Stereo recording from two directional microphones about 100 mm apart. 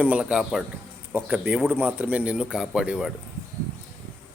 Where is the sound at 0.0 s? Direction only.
15° right (ahead or behind).